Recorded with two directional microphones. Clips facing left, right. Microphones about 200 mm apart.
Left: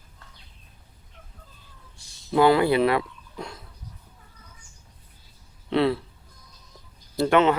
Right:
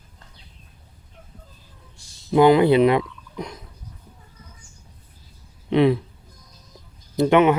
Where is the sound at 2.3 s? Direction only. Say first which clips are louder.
Right 4 dB; 20° right (ahead or behind).